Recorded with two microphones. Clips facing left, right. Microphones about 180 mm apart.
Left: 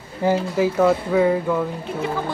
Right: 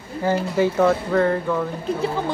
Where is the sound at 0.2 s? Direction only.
20° left (ahead or behind).